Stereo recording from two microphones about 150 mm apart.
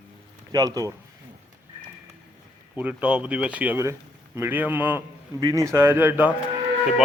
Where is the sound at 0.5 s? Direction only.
25° right (ahead or behind).